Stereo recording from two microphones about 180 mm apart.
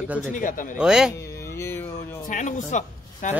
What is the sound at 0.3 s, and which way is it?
Speech, 50° left (ahead or behind).